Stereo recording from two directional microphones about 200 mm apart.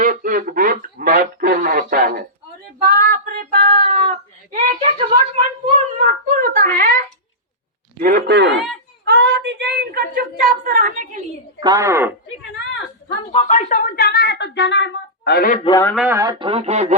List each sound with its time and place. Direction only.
0.0 s a sound: 40° right (ahead or behind)
2.7 s female singing: 45° right (ahead or behind)
4.5 s a sound: 35° right (ahead or behind)
7.9 s female singing: 45° right (ahead or behind)
9.0 s a woman's voice: 55° right (ahead or behind)
11.6 s speech: 15° right (ahead or behind)
13.3 s a woman's voice: 35° left (ahead or behind)
13.7 s speech: 50° left (ahead or behind)
15.6 s a man's voice: 20° left (ahead or behind)
16.0 s speech: 10° right (ahead or behind)
16.4 s speech: 30° right (ahead or behind)